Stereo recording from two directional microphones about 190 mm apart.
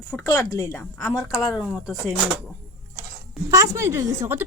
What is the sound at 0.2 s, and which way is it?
Speech, 20° left (ahead or behind).